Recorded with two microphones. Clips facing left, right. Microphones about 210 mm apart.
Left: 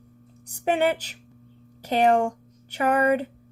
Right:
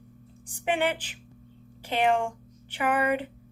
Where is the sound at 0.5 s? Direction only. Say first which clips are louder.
Left 4 dB; 40° left (ahead or behind).